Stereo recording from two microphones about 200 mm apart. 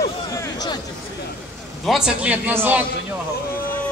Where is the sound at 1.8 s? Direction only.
5° right (ahead or behind).